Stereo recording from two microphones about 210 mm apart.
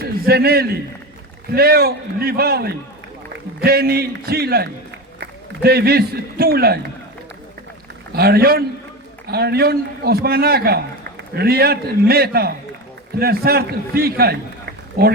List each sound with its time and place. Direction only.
0.0 s a man's voice: 50° right (ahead or behind)
8.1 s a man's voice: 50° right (ahead or behind)